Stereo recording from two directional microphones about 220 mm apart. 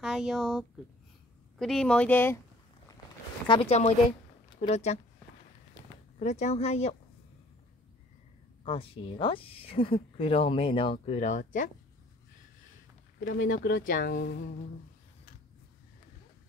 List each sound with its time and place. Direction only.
0.0 s speech: centre (ahead or behind)
3.4 s speech: 25° left (ahead or behind)
6.1 s speech: 30° left (ahead or behind)
8.6 s speech: 25° left (ahead or behind)
13.2 s speech: 40° left (ahead or behind)